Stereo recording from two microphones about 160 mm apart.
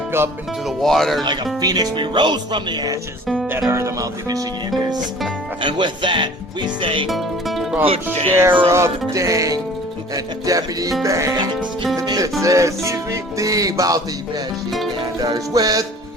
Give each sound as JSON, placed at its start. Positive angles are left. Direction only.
{"t": 0.8, "sound": "speech", "side_deg": 0}
{"t": 1.6, "sound": "music", "side_deg": -25}
{"t": 5.6, "sound": "speech", "side_deg": -30}
{"t": 7.1, "sound": "music", "side_deg": 0}
{"t": 8.4, "sound": "music", "side_deg": -15}